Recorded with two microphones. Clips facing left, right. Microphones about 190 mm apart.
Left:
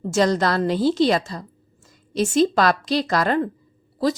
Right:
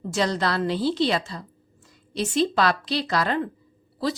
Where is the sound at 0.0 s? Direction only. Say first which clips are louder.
Left 5 dB; 45° left (ahead or behind).